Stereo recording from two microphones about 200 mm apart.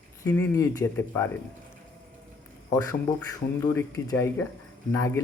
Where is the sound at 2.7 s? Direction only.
15° left (ahead or behind).